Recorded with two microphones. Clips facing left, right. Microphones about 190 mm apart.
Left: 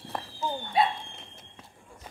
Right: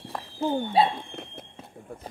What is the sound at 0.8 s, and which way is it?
Speech, 30° right (ahead or behind).